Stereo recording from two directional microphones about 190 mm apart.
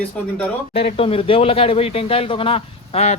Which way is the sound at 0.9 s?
30° left (ahead or behind).